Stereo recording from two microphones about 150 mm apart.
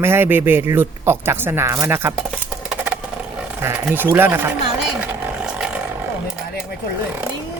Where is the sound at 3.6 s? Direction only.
15° right (ahead or behind).